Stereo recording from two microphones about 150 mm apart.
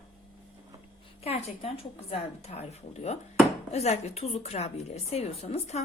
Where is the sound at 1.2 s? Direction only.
45° left (ahead or behind).